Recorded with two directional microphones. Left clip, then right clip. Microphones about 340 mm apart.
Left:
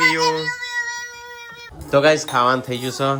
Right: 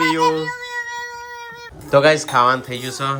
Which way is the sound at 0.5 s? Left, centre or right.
Right.